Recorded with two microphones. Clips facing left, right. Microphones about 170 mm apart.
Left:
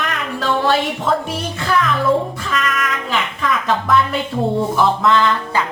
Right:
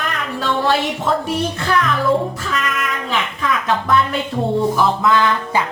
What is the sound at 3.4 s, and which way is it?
Music, centre (ahead or behind).